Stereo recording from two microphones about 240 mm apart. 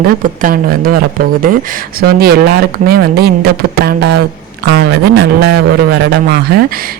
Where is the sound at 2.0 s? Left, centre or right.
Right.